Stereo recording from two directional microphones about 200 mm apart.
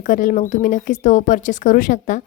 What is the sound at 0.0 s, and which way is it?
Speech, 40° left (ahead or behind).